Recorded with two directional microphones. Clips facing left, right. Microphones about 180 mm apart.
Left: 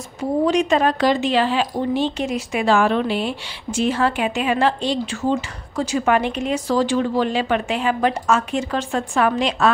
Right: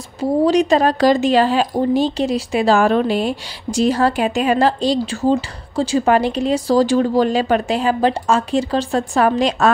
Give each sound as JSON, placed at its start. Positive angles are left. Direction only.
{"t": 0.2, "sound": "a woman's voice", "side_deg": -35}